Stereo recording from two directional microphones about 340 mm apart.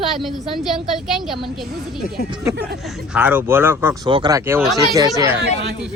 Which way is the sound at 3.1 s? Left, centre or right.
Centre.